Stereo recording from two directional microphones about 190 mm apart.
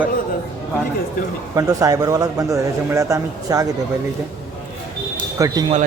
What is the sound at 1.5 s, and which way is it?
A man's voice, 20° right (ahead or behind).